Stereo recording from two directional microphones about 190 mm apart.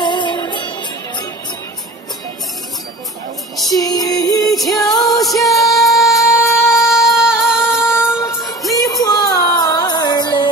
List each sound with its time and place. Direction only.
0.0 s music: 25° left (ahead or behind)
3.7 s music: 20° left (ahead or behind)
5.4 s music: centre (ahead or behind)
6.2 s music: 15° left (ahead or behind)
6.7 s music: centre (ahead or behind)
7.8 s music: 10° left (ahead or behind)